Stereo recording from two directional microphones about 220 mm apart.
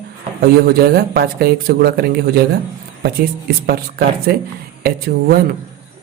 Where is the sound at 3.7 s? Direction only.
45° right (ahead or behind).